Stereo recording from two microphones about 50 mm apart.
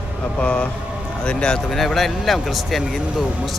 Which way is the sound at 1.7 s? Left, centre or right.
Centre.